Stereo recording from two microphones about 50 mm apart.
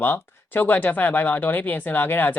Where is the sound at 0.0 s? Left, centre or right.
Left.